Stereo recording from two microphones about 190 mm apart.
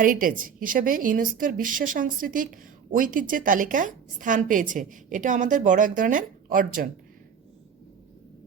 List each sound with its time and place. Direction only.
0.0 s a woman's voice: 45° right (ahead or behind)